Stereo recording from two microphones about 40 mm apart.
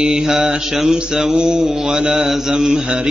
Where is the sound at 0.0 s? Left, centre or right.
Centre.